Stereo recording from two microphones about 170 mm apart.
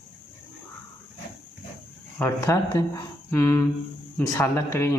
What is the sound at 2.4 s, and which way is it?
Speech, 20° left (ahead or behind).